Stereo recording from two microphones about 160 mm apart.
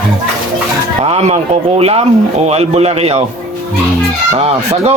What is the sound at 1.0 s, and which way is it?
Speech, 40° right (ahead or behind).